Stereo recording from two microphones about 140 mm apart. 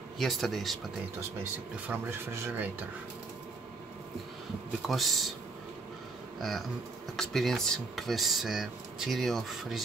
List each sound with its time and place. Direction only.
0.2 s speech: centre (ahead or behind)
1.4 s speech: 15° right (ahead or behind)
4.8 s speech: centre (ahead or behind)
7.2 s speech: 5° left (ahead or behind)